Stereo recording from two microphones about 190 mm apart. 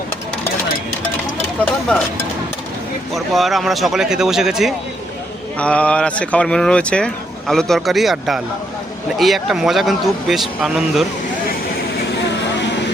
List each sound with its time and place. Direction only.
3.2 s speech: centre (ahead or behind)